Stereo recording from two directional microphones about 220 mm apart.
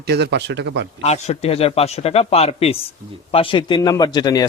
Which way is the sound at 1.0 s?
30° left (ahead or behind).